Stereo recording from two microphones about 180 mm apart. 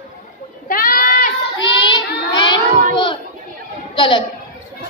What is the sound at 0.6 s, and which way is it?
Goat, 50° left (ahead or behind).